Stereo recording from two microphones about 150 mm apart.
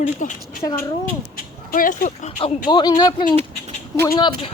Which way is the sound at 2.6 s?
30° left (ahead or behind).